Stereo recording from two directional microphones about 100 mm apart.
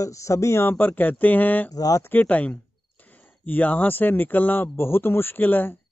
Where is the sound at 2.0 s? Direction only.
15° left (ahead or behind).